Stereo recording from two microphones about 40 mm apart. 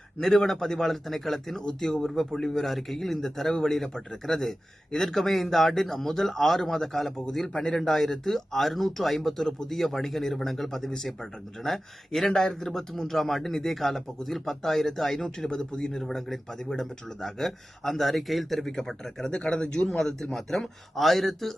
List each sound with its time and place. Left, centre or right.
0.2 s a man's voice: centre; by 19.9 s left
19.9 s speech: centre